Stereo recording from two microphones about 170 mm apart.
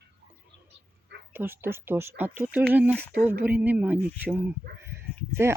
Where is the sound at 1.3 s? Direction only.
10° right (ahead or behind).